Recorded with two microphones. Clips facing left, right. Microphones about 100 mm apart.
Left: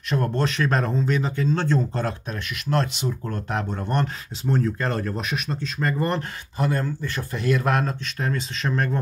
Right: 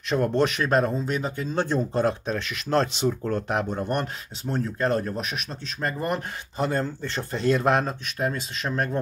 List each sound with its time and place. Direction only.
0.1 s speech: 20° right (ahead or behind)
2.2 s speech: 30° right (ahead or behind)
3.4 s speech: 20° right (ahead or behind)
4.5 s speech: 5° right (ahead or behind)
6.6 s speech: 25° right (ahead or behind)
8.2 s speech: 10° right (ahead or behind)